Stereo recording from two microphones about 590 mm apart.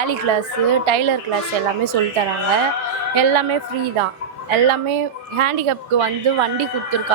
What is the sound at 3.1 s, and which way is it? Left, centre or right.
Speech, right.